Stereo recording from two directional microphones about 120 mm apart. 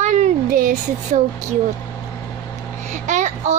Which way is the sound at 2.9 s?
85° right.